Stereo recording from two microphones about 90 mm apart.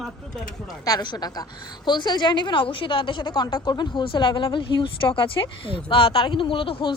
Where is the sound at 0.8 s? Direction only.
50° left (ahead or behind).